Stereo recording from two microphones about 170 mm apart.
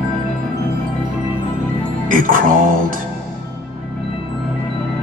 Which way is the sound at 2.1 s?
50° right (ahead or behind).